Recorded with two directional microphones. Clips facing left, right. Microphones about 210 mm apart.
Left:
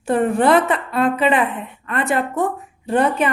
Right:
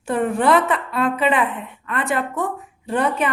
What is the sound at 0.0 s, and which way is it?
A woman's voice, 35° left (ahead or behind).